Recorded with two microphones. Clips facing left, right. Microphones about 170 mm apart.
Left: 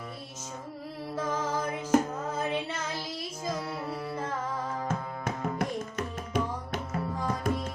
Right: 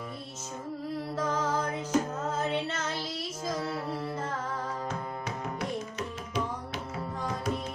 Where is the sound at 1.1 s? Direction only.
10° left (ahead or behind).